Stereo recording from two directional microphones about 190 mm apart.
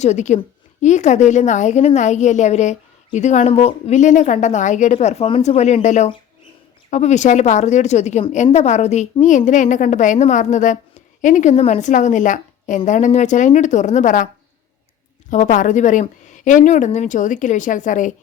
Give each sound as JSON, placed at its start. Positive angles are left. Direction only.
{"t": 0.0, "sound": "a woman's voice", "side_deg": 40}
{"t": 15.3, "sound": "a woman's voice", "side_deg": 40}